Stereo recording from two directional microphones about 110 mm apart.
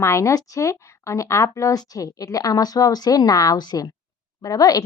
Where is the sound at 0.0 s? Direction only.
25° left (ahead or behind).